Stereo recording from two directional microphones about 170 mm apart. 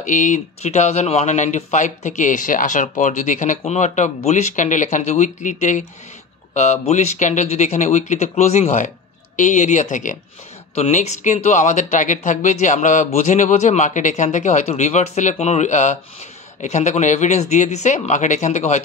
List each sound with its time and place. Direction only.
0.0 s speech: 50° left (ahead or behind)